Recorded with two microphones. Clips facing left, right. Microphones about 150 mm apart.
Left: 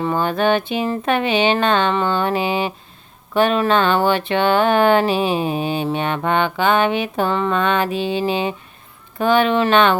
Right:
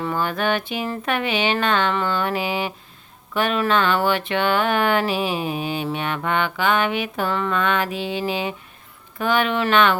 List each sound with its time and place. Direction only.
0.0 s speech: 25° left (ahead or behind)